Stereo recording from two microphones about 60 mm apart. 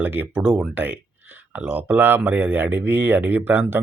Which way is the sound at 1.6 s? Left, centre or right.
Right.